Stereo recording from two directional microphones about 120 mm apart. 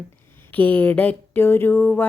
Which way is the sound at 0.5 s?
15° left (ahead or behind).